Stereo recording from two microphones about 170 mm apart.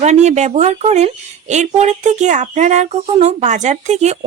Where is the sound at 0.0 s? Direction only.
40° right (ahead or behind).